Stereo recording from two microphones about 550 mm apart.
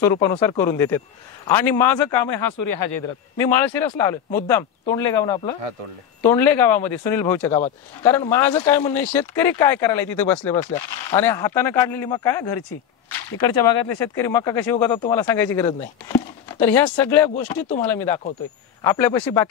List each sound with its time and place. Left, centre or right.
0.0 s a man's voice: centre
2.2 s speech: left
3.5 s a man's voice: centre
4.8 s speech: left
5.2 s a man's voice: centre
13.4 s speech: left
13.9 s a man's voice: centre